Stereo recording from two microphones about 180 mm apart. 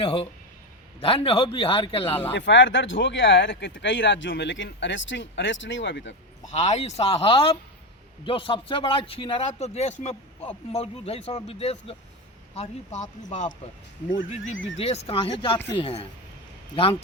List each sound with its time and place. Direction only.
0.0 s a man's voice: 30° left (ahead or behind)
2.3 s speech: 90° left
6.5 s a man's voice: 40° left (ahead or behind)
14.8 s a man's voice: 35° left (ahead or behind)